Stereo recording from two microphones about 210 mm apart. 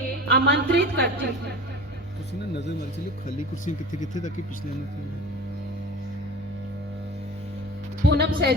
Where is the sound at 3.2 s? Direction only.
35° left (ahead or behind).